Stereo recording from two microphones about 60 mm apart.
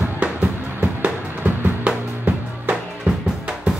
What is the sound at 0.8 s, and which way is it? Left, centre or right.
Music, right.